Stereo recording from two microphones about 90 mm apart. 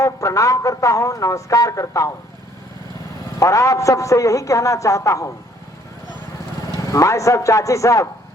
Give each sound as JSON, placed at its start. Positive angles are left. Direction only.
{"t": 0.0, "sound": "speech", "side_deg": 35}
{"t": 3.4, "sound": "speech", "side_deg": 35}
{"t": 6.7, "sound": "speech", "side_deg": 40}